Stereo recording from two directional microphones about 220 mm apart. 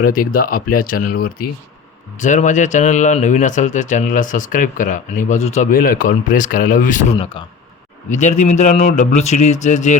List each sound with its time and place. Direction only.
0.0 s speech: 40° left (ahead or behind)